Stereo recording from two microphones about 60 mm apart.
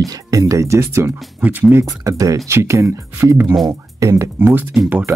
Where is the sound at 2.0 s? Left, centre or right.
Right.